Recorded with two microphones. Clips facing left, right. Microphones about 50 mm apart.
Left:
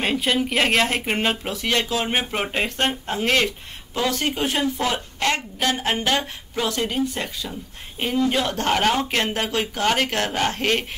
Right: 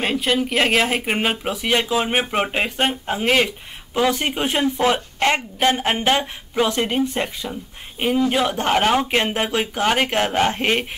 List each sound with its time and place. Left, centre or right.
0.0 s a woman's voice: centre; by 7.4 s right
8.0 s speech: centre